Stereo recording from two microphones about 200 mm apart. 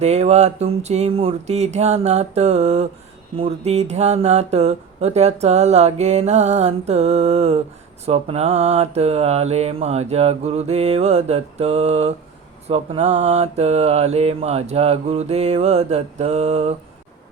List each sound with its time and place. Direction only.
0.0 s speech: 30° right (ahead or behind)